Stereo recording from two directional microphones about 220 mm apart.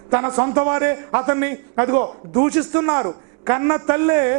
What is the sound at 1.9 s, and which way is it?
Speech, 25° right (ahead or behind).